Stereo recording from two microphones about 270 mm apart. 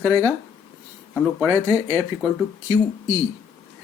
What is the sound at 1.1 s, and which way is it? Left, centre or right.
Speech, centre.